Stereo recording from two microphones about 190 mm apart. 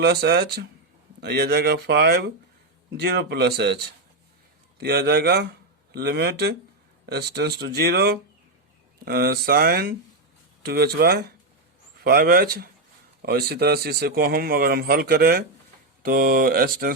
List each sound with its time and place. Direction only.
0.0 s a man's voice: 60° right (ahead or behind)